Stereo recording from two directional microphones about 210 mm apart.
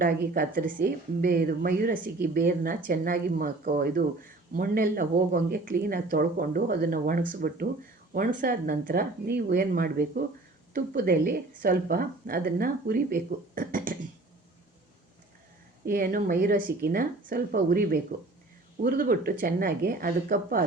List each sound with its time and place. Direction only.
0.0 s speech: 40° right (ahead or behind)
15.9 s speech: 45° right (ahead or behind)